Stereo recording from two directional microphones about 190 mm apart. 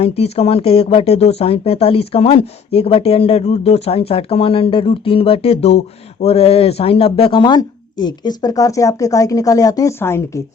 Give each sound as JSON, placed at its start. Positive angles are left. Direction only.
{"t": 0.0, "sound": "speech", "side_deg": 30}